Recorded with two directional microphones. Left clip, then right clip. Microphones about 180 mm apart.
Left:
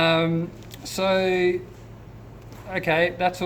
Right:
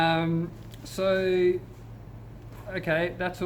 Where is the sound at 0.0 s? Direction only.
15° left (ahead or behind).